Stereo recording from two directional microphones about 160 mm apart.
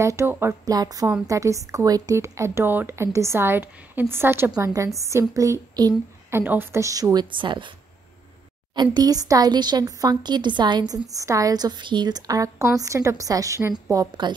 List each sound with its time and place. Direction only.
0.0 s a woman's voice: 20° right (ahead or behind)
8.7 s a woman's voice: 25° right (ahead or behind)